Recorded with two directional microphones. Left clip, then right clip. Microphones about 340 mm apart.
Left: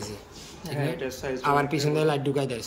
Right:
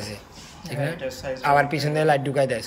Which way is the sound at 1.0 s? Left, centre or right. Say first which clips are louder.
Right 2 dB; centre.